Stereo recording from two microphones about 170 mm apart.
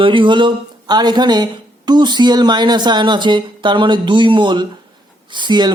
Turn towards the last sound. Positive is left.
turn(degrees=-25)  # may be behind; listen again after turning